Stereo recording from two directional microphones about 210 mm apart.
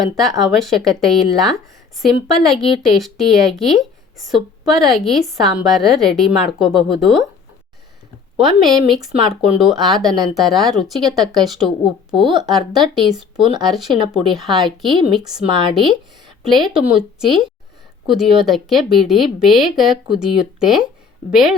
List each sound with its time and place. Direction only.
0.2 s a woman's voice: centre (ahead or behind)
8.4 s a woman's voice: centre (ahead or behind)
11.1 s speech: 15° right (ahead or behind)
11.4 s a woman's voice: centre (ahead or behind)